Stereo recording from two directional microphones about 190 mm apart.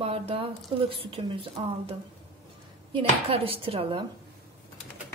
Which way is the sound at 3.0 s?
30° right (ahead or behind).